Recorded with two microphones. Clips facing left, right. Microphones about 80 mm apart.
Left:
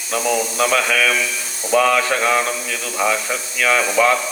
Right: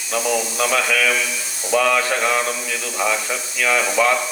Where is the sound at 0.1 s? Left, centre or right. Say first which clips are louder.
Left 2 dB; left.